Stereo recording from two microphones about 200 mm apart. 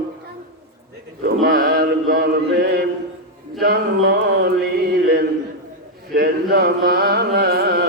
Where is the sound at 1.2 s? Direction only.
50° right (ahead or behind).